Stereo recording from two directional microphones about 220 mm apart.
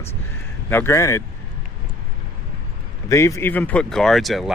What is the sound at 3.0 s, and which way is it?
Speech, 15° left (ahead or behind).